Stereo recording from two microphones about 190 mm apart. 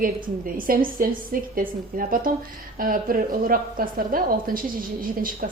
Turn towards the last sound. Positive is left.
turn(degrees=-45)  # may be behind; listen again after turning